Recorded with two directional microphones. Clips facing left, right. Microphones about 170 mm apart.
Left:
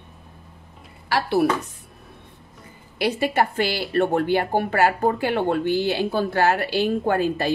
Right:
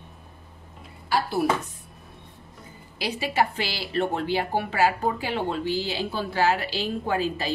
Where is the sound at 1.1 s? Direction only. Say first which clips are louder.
Left 4 dB; 75° left (ahead or behind).